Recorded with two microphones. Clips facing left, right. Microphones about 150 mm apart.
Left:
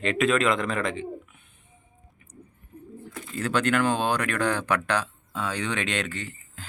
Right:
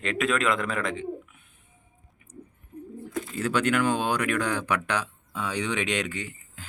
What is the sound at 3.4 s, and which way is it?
Speech, 10° right (ahead or behind).